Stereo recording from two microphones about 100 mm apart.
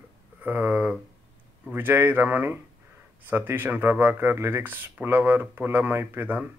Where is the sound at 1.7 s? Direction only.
20° right (ahead or behind).